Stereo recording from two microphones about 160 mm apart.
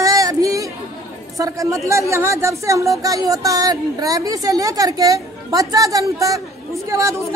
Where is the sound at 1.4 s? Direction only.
20° right (ahead or behind).